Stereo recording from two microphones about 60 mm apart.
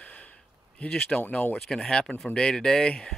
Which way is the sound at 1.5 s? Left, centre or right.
Centre.